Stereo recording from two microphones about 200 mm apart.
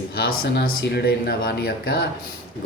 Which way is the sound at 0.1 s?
50° left (ahead or behind).